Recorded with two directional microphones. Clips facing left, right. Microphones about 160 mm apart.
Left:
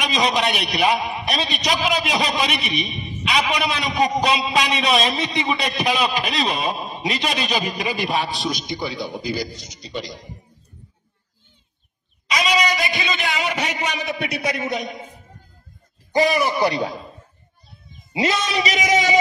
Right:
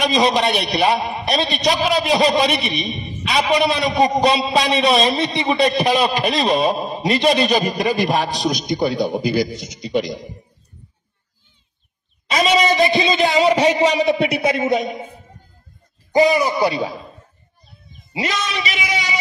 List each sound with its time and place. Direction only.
0.1 s a man's voice: 30° right (ahead or behind); by 9.7 s 60° right (ahead or behind)
12.3 s a man's voice: 35° right (ahead or behind); by 17.2 s centre (ahead or behind)
18.1 s speech: 30° left (ahead or behind); by 19.1 s 45° left (ahead or behind)